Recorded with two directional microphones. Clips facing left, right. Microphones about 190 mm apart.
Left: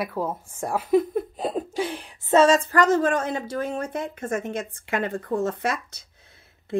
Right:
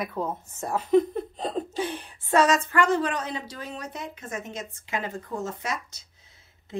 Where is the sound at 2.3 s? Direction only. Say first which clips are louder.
Left 4 dB; 30° left (ahead or behind).